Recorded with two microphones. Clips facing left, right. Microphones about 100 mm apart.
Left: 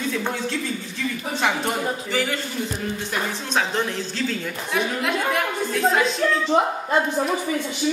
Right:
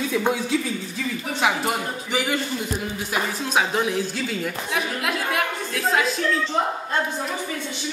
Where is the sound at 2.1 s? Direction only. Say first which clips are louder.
Right 2 dB; 15° right (ahead or behind).